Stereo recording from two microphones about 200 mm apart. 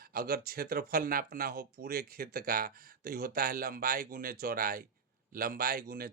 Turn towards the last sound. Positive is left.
turn(degrees=-45)  # may be behind; listen again after turning